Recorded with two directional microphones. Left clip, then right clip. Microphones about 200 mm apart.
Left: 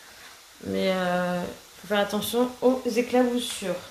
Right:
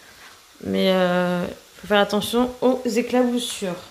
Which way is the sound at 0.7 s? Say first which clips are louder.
Right 6 dB; 40° right (ahead or behind).